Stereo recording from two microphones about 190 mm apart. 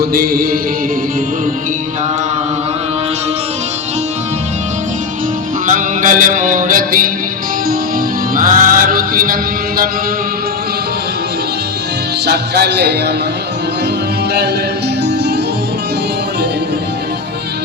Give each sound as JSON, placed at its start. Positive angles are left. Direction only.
{"t": 0.0, "sound": "music", "side_deg": -55}
{"t": 5.6, "sound": "music", "side_deg": -45}
{"t": 8.4, "sound": "music", "side_deg": -45}
{"t": 12.2, "sound": "music", "side_deg": -60}